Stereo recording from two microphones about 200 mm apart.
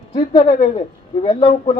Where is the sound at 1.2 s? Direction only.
35° left (ahead or behind).